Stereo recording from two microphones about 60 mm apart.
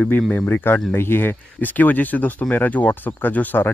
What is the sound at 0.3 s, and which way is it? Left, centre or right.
Speech, left.